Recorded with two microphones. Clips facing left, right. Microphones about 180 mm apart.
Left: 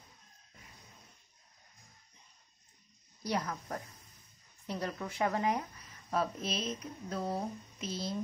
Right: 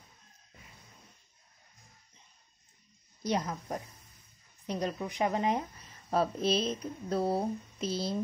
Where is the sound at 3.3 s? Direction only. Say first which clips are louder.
Right 3 dB; 20° right (ahead or behind).